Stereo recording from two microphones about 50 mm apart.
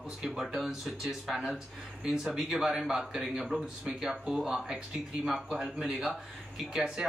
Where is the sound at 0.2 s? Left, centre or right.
Centre.